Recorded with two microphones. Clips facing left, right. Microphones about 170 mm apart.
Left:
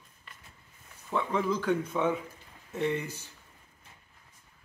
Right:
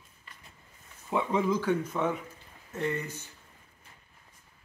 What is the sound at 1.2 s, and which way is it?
Speech, 20° right (ahead or behind).